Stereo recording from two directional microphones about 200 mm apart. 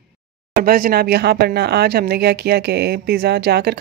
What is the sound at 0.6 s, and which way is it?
Speech, 45° right (ahead or behind).